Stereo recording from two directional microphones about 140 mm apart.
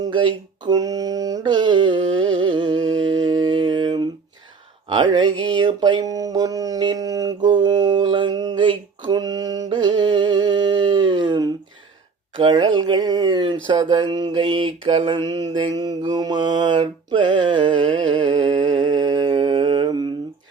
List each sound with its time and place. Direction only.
0.0 s mantra: 35° right (ahead or behind)
12.4 s speech: 30° right (ahead or behind)
13.7 s mantra: 30° right (ahead or behind)